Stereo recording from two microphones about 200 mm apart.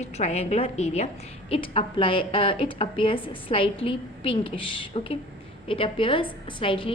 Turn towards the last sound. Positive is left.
turn(degrees=25)  # may be behind; listen again after turning